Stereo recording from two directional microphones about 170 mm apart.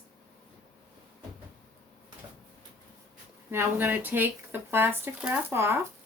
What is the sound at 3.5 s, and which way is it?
Speech, 10° right (ahead or behind).